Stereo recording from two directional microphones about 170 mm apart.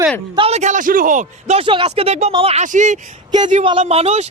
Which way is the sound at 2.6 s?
45° right (ahead or behind).